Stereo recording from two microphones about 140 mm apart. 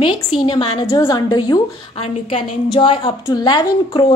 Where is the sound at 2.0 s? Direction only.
40° left (ahead or behind).